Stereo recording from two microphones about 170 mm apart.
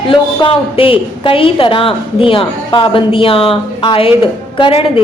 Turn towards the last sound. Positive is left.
turn(degrees=30)  # may be behind; listen again after turning